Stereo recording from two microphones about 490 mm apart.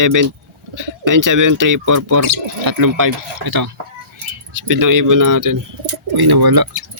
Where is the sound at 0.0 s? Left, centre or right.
Right.